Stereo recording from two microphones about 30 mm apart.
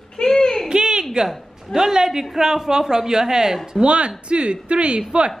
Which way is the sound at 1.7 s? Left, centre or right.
Centre.